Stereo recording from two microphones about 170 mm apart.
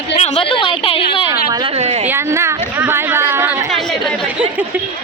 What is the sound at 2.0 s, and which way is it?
A woman's voice, 15° right (ahead or behind).